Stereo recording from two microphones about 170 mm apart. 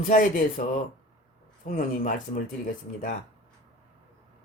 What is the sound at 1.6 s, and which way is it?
Speech, 50° left (ahead or behind).